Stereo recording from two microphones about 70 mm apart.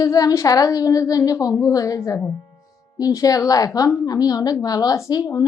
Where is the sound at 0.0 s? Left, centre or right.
Left.